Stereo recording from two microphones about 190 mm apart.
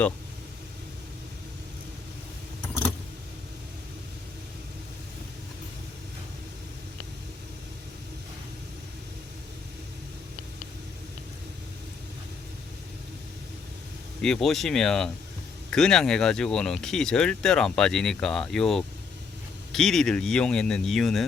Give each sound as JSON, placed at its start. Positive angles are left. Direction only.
{"t": 14.2, "sound": "speech", "side_deg": 0}